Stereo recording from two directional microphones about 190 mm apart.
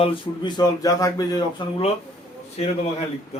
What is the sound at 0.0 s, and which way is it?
Speech, 25° left (ahead or behind).